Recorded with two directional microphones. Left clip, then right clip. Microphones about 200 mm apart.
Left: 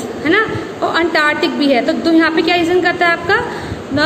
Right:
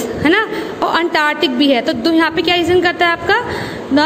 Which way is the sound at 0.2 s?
35° right (ahead or behind).